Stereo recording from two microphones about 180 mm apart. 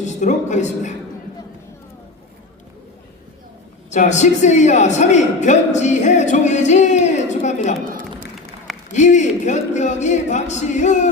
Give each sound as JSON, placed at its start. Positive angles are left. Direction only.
{"t": 0.0, "sound": "a man's voice", "side_deg": 40}
{"t": 3.8, "sound": "a man's voice", "side_deg": 40}
{"t": 7.9, "sound": "a sound", "side_deg": -50}
{"t": 8.9, "sound": "a man's voice", "side_deg": 40}